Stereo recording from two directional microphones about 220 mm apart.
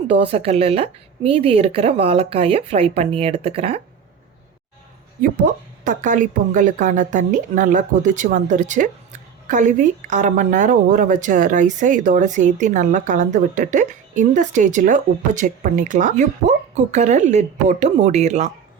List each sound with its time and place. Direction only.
0.3 s a woman's voice: 30° right (ahead or behind)
5.8 s a woman's voice: 35° right (ahead or behind)